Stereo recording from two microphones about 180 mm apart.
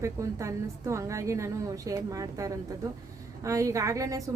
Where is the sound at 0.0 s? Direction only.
15° right (ahead or behind).